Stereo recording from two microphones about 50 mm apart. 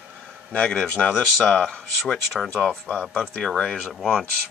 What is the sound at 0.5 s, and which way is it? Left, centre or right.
Speech, centre.